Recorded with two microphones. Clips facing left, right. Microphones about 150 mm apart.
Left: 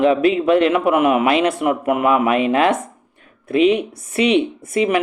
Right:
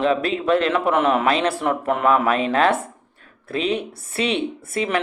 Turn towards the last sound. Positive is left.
turn(degrees=15)  # may be behind; listen again after turning